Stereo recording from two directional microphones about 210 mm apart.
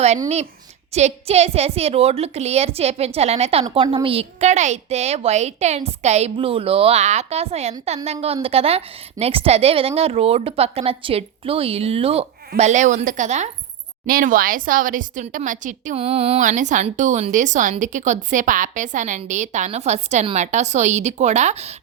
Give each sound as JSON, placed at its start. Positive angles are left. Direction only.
{"t": 0.9, "sound": "a woman's voice", "side_deg": -30}